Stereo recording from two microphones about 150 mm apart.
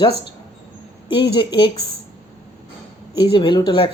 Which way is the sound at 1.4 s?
35° left (ahead or behind).